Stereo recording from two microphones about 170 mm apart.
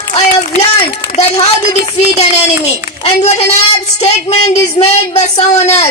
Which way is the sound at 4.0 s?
40° left (ahead or behind).